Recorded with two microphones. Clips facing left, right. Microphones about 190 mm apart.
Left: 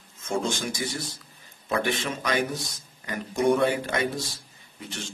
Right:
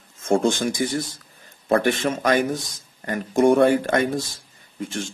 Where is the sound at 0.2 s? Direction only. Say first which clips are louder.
Right 8 dB; 50° right (ahead or behind).